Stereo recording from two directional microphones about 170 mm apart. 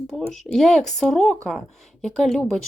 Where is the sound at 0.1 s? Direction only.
Centre (ahead or behind).